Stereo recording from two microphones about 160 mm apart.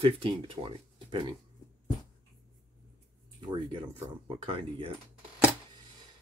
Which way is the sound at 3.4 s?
25° right (ahead or behind).